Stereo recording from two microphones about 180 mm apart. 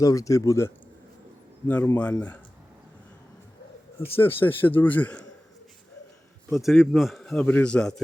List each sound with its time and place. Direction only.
0.0 s a man's voice: 20° left (ahead or behind)
4.2 s a man's voice: 10° left (ahead or behind)
6.5 s a man's voice: centre (ahead or behind)